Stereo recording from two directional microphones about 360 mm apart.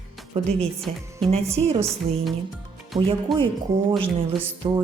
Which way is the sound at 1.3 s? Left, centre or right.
Centre.